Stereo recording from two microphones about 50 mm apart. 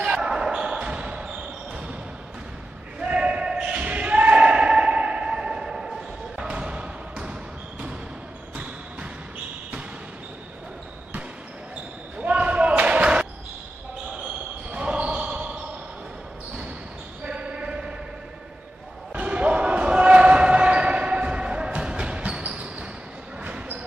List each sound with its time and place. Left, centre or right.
0.0 s basketball bounce: centre
3.0 s basketball bounce: right
3.8 s a sound: right
6.4 s basketball bounce: right
12.2 s basketball bounce: right
14.7 s basketball bounce: right
17.2 s basketball bounce: right
19.1 s basketball bounce: right